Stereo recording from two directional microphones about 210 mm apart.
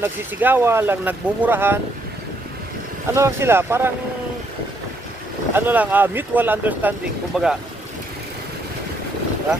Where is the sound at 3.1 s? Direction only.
10° right (ahead or behind).